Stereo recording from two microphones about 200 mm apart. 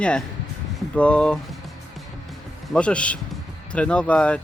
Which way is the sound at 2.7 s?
5° left (ahead or behind).